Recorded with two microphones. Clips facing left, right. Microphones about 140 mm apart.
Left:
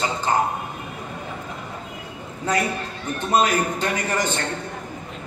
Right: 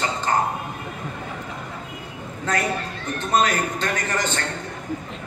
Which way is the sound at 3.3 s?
10° left (ahead or behind).